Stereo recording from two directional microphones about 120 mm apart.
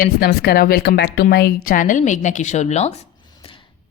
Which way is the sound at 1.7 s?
90° left.